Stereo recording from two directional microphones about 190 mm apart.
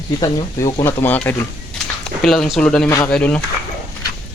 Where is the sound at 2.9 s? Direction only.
15° left (ahead or behind).